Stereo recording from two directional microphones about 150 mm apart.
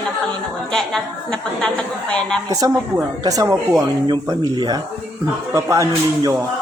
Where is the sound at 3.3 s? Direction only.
20° right (ahead or behind).